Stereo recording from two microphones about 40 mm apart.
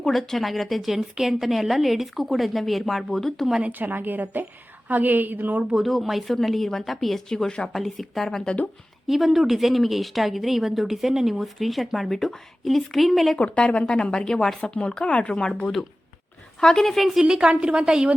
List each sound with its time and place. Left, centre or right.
0.0 s a woman's voice: centre
3.7 s a woman's voice: right
5.7 s a woman's voice: centre
7.3 s a woman's voice: centre
9.0 s a woman's voice: centre
13.4 s a woman's voice: left; by 14.6 s centre
14.6 s a woman's voice: left; by 17.2 s centre
17.2 s a woman's voice: right